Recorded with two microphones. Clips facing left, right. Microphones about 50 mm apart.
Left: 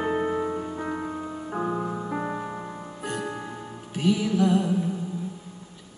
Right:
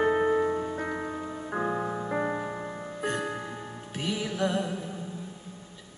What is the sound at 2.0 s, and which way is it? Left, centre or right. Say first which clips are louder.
Music: right 1 dB; right.